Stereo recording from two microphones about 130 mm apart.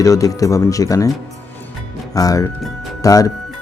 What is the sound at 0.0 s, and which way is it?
Speech, 25° left (ahead or behind).